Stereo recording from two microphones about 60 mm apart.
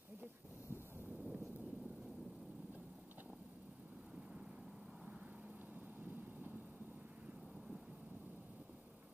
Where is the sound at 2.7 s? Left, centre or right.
Right.